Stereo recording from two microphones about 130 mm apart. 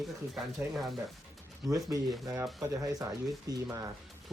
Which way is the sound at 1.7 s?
25° right (ahead or behind).